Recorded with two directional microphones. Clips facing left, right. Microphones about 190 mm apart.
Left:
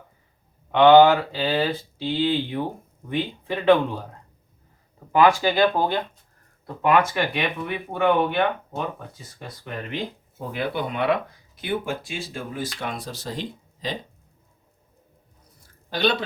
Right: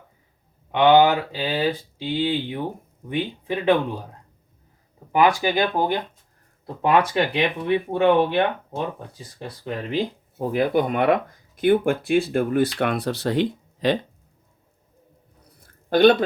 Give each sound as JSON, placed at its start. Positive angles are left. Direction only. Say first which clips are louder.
{"t": 0.7, "sound": "speech", "louder": "left 2 dB", "side_deg": -15}
{"t": 5.1, "sound": "speech", "louder": "left 1 dB", "side_deg": -15}
{"t": 6.8, "sound": "speech", "louder": "right 1 dB", "side_deg": -30}
{"t": 15.6, "sound": "a sound", "louder": "right 9 dB", "side_deg": -50}